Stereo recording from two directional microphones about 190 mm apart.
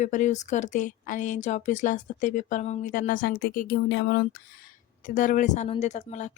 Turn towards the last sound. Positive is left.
turn(degrees=40)  # may be behind; listen again after turning